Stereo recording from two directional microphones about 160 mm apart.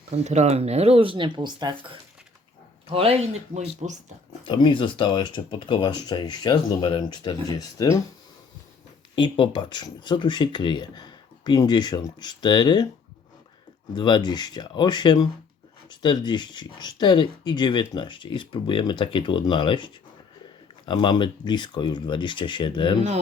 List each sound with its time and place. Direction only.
0.1 s speech: 45° right (ahead or behind)
4.4 s speech: 30° left (ahead or behind)
9.1 s speech: 30° left (ahead or behind)
13.9 s speech: 25° left (ahead or behind)